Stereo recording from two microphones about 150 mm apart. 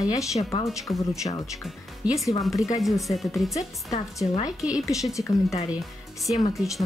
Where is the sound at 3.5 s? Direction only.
20° left (ahead or behind).